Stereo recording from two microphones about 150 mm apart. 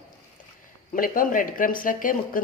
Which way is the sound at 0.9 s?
65° left (ahead or behind).